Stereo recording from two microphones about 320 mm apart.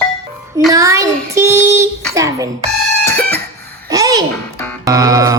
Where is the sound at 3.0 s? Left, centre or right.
Centre.